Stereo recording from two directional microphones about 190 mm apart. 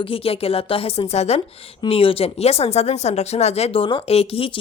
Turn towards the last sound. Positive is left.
turn(degrees=30)  # may be behind; listen again after turning